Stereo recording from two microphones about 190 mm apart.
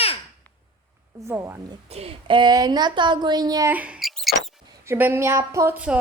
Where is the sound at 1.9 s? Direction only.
30° right (ahead or behind).